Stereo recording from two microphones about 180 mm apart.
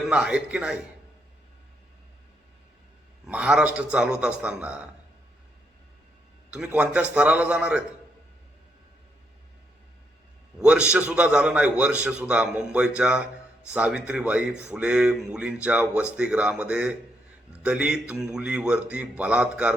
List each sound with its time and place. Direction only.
0.1 s a man's voice: 5° right (ahead or behind)
3.2 s a man's voice: 5° right (ahead or behind)
6.5 s a man's voice: 5° right (ahead or behind)
10.6 s a man's voice: 5° right (ahead or behind)